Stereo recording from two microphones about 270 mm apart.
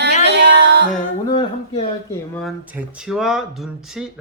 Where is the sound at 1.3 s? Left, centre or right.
Left.